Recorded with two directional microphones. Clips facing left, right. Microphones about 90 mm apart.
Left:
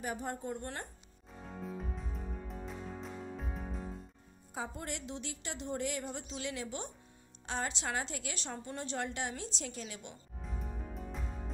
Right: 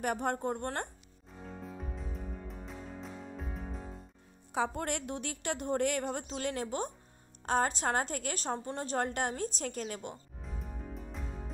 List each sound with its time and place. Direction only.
0.0 s a woman's voice: 65° right (ahead or behind)
1.4 s music: centre (ahead or behind)
4.5 s a woman's voice: 65° right (ahead or behind); by 10.1 s 50° right (ahead or behind)
10.4 s music: centre (ahead or behind)